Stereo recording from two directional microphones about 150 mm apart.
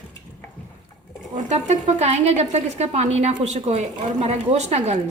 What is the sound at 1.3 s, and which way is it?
Speech, 50° right (ahead or behind).